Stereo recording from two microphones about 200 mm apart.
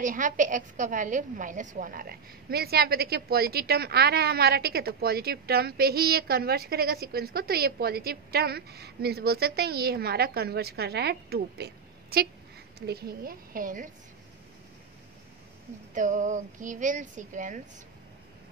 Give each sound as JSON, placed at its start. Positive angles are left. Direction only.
{"t": 0.0, "sound": "a woman's voice", "side_deg": -40}
{"t": 15.9, "sound": "speech", "side_deg": -40}